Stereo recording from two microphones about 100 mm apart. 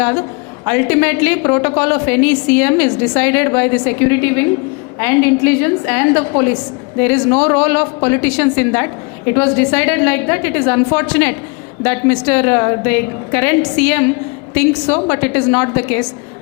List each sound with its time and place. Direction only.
0.0 s a woman's voice: 25° left (ahead or behind)